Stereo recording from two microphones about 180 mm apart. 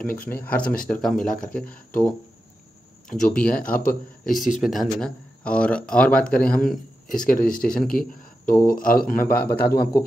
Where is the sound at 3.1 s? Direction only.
5° left (ahead or behind).